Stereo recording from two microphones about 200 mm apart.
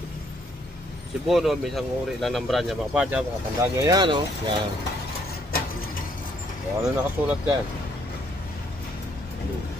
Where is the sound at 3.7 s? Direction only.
15° right (ahead or behind).